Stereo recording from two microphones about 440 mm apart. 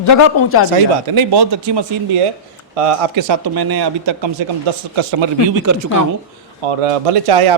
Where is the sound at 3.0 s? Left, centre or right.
Right.